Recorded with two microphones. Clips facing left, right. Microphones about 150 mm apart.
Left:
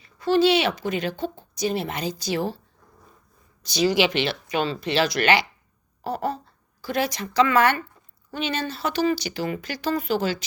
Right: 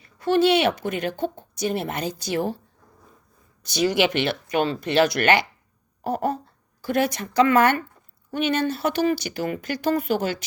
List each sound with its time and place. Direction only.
0.0 s speech: 60° right (ahead or behind)
3.7 s speech: 60° right (ahead or behind)